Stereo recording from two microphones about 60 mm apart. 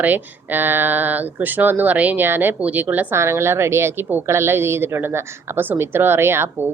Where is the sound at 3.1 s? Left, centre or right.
Right.